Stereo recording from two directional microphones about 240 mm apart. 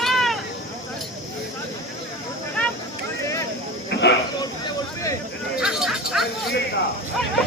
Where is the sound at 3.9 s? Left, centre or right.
Left.